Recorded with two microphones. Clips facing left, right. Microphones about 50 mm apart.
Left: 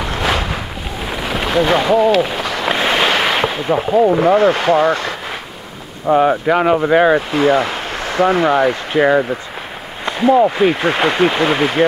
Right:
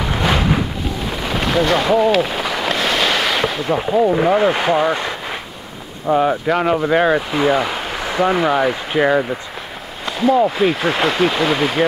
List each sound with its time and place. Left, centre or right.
0.0 s wind noise: centre
1.9 s speech: centre
2.7 s a sound: centre
3.7 s speech: centre
4.4 s speech: centre
6.0 s speech: centre
10.0 s speech: centre